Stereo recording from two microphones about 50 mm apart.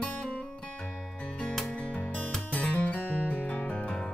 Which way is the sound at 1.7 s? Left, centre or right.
Left.